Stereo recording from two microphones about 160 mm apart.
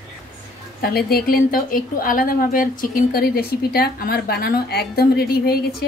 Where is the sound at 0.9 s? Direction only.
70° left (ahead or behind).